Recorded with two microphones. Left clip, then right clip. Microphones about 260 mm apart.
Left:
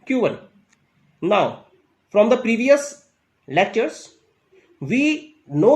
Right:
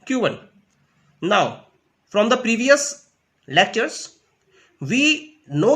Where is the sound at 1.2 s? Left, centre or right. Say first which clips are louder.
Even; right.